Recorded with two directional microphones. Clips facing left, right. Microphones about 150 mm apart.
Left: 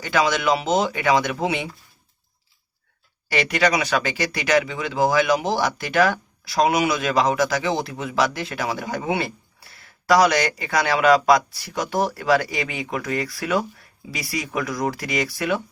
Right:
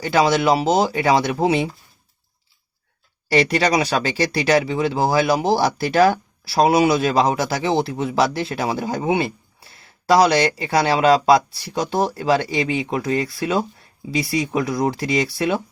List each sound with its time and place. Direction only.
0.0 s speech: 30° right (ahead or behind)
3.2 s speech: 35° right (ahead or behind)